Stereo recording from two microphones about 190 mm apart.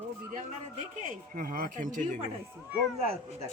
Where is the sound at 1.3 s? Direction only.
45° right (ahead or behind).